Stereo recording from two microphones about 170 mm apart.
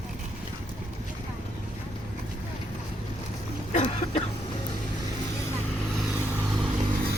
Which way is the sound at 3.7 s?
40° left (ahead or behind).